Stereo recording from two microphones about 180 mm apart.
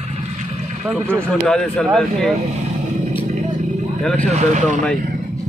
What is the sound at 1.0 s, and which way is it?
Speech, 5° left (ahead or behind).